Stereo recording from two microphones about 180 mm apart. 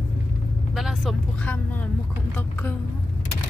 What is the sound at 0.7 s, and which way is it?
Speech, centre (ahead or behind).